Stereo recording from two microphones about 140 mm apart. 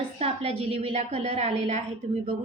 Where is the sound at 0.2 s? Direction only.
45° right (ahead or behind).